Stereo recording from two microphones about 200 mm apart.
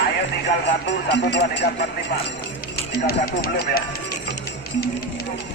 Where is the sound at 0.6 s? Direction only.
60° left (ahead or behind).